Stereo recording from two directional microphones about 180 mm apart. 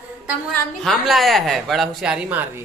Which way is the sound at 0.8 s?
Centre (ahead or behind).